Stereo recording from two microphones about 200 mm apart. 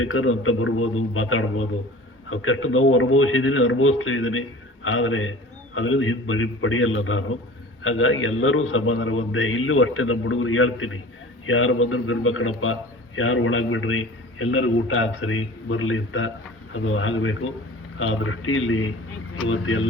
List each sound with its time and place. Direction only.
0.0 s a man's voice: 90° left